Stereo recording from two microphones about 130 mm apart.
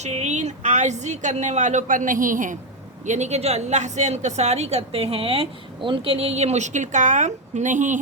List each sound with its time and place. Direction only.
0.0 s a woman's voice: 60° right (ahead or behind); by 2.6 s 90° right
3.1 s a woman's voice: 60° right (ahead or behind)